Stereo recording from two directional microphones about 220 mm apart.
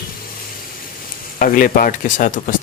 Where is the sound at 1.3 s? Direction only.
40° left (ahead or behind).